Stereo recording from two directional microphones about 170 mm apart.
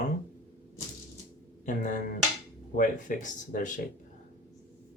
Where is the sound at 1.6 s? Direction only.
50° left (ahead or behind).